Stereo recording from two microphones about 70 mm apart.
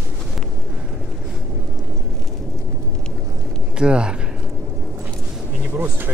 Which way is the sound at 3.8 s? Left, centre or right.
Centre.